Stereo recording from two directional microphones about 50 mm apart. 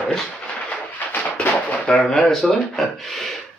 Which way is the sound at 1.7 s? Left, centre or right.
Centre.